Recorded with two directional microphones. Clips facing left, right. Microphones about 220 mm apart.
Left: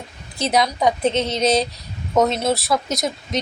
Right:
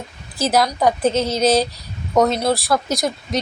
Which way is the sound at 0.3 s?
Centre (ahead or behind).